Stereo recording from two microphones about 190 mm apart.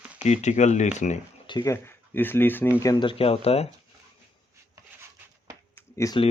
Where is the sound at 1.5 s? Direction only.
20° left (ahead or behind).